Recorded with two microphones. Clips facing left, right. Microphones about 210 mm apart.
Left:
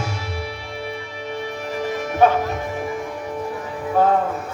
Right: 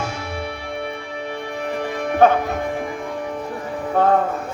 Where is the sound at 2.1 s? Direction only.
55° right (ahead or behind).